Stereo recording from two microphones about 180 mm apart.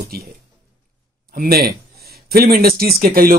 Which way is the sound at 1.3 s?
55° right (ahead or behind).